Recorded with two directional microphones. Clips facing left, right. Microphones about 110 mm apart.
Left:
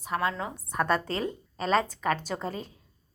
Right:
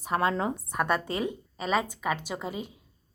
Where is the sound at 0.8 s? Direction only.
15° right (ahead or behind).